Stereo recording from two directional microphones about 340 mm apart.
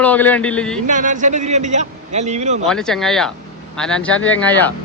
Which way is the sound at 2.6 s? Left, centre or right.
Centre.